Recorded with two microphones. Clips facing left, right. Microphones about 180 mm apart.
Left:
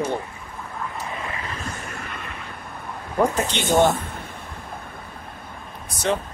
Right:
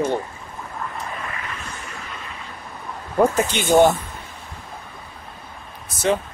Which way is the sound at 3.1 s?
5° right (ahead or behind).